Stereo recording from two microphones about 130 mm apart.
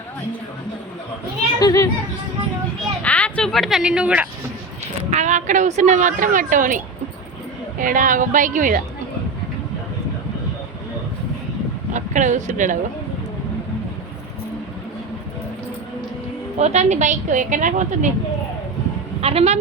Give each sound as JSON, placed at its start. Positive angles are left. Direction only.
{"t": 1.5, "sound": "a child's voice", "side_deg": 25}
{"t": 3.0, "sound": "speech", "side_deg": 10}
{"t": 5.1, "sound": "a woman's voice", "side_deg": -70}
{"t": 11.9, "sound": "speech", "side_deg": -75}
{"t": 16.6, "sound": "speech", "side_deg": -60}
{"t": 19.2, "sound": "a woman's voice", "side_deg": -50}